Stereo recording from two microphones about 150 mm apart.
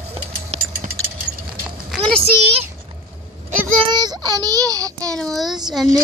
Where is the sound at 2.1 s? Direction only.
40° right (ahead or behind).